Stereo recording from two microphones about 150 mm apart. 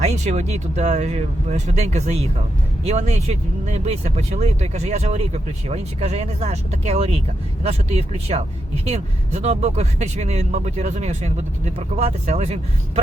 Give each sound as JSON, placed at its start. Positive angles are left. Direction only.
{"t": 0.0, "sound": "speech", "side_deg": -50}